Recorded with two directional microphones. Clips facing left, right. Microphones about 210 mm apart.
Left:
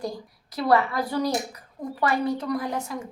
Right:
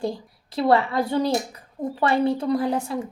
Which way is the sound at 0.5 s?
25° right (ahead or behind).